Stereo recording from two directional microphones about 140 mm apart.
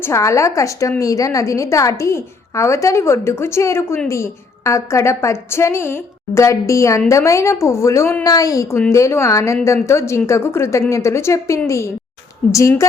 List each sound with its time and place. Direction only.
0.0 s a woman's voice: 20° left (ahead or behind)